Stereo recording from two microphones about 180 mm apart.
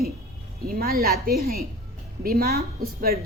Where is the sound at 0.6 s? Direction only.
55° right (ahead or behind).